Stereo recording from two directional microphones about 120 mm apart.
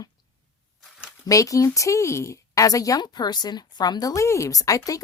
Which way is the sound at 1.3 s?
30° left (ahead or behind).